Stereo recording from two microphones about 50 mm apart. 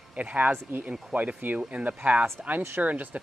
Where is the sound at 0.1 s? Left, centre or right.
Right.